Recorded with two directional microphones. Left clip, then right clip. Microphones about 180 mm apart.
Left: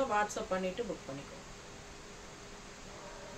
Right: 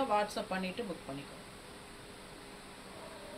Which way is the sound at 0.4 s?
20° left (ahead or behind).